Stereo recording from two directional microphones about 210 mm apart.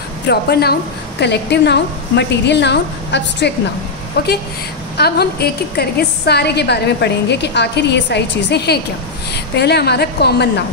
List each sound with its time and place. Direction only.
0.3 s a woman's voice: 50° left (ahead or behind)
4.9 s a woman's voice: 50° left (ahead or behind)